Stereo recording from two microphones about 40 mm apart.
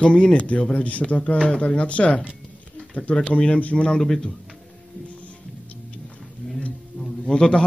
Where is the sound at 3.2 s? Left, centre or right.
Left.